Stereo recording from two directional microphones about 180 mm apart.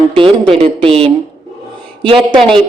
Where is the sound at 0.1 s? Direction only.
30° right (ahead or behind).